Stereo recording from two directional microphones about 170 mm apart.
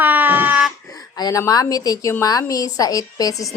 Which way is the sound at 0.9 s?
20° left (ahead or behind).